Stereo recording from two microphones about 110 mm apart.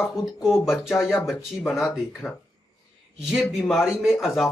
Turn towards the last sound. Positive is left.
turn(degrees=0)  # may be behind; listen again after turning